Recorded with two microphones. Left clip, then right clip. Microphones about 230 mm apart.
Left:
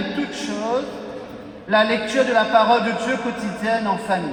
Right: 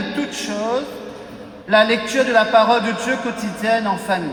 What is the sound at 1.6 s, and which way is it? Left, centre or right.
Speech, right.